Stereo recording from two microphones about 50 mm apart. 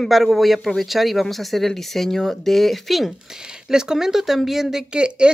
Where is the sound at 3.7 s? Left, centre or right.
Centre.